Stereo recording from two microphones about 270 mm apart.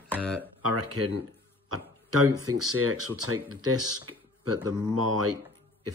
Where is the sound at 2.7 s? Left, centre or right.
Right.